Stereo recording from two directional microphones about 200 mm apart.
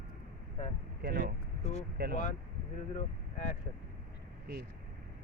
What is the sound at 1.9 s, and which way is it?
Speech, 50° right (ahead or behind).